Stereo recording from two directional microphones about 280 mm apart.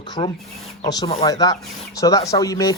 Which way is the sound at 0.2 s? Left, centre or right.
Left.